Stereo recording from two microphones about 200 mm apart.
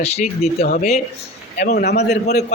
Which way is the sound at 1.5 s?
50° left (ahead or behind).